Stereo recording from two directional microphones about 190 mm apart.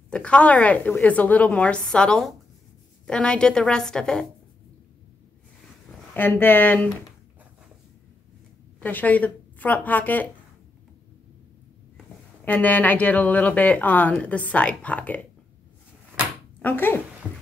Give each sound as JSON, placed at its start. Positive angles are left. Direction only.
{"t": 0.1, "sound": "a woman's voice", "side_deg": 5}
{"t": 6.1, "sound": "a woman's voice", "side_deg": 10}
{"t": 8.7, "sound": "speech", "side_deg": 10}
{"t": 12.4, "sound": "a woman's voice", "side_deg": 10}
{"t": 16.6, "sound": "a woman's voice", "side_deg": 10}